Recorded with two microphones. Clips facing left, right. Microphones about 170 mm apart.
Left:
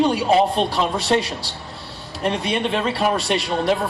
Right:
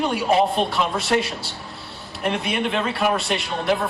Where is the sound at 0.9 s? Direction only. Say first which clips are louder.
Left 2 dB; 30° left (ahead or behind).